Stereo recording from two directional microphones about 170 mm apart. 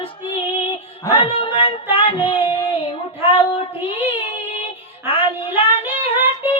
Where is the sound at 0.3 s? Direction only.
30° left (ahead or behind).